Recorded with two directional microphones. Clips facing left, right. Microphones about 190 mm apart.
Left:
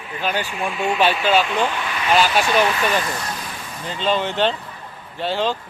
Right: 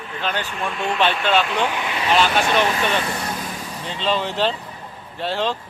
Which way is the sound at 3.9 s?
Centre (ahead or behind).